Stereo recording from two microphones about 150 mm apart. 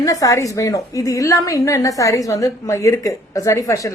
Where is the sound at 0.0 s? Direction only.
20° left (ahead or behind).